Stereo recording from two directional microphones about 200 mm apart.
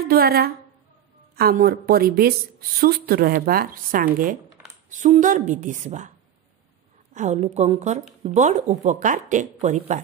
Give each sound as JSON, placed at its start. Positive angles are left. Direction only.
{"t": 0.0, "sound": "a woman's voice", "side_deg": -50}
{"t": 7.2, "sound": "speech", "side_deg": -35}